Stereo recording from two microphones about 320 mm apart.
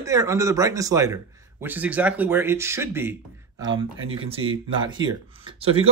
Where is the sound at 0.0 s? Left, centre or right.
Centre.